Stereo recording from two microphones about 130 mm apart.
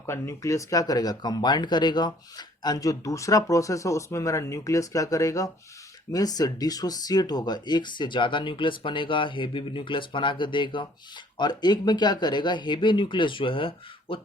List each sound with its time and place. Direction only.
0.0 s speech: 20° left (ahead or behind); by 14.2 s 40° left (ahead or behind)